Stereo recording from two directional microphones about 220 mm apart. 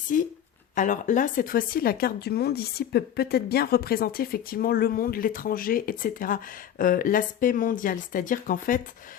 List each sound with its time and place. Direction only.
0.1 s speech: 40° left (ahead or behind)